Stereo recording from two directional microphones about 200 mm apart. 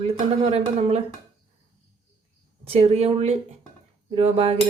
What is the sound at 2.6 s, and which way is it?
Speech, 30° right (ahead or behind).